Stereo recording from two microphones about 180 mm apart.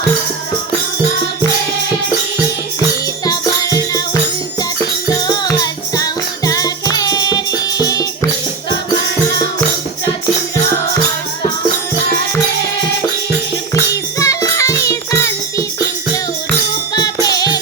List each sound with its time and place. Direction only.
2.8 s music: 20° left (ahead or behind)
13.7 s music: 20° left (ahead or behind)